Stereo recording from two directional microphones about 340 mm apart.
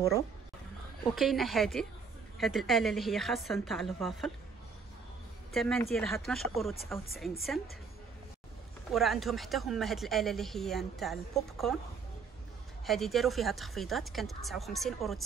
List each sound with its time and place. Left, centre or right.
1.1 s speech: centre
5.5 s speech: centre
8.9 s speech: centre
12.8 s speech: centre